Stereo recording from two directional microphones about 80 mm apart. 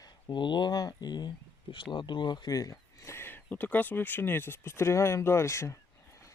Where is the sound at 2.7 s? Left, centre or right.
Left.